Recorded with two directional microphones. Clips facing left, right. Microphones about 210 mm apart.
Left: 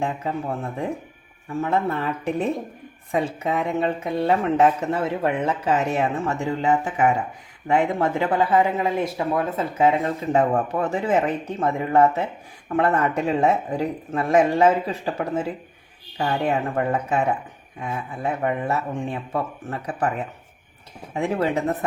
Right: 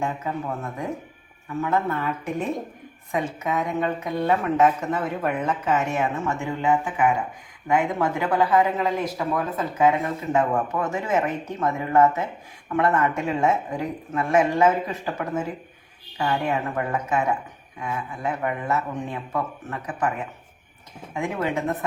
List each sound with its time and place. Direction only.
0.0 s speech: 30° left (ahead or behind)
7.7 s speech: 30° left (ahead or behind)
21.2 s speech: 35° left (ahead or behind)